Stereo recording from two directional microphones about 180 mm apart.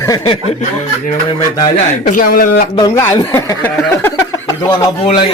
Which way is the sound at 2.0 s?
50° left (ahead or behind).